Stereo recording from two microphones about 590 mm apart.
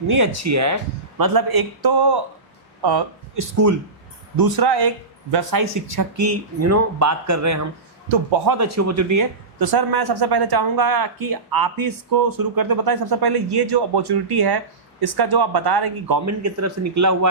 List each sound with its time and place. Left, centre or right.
0.1 s speech: right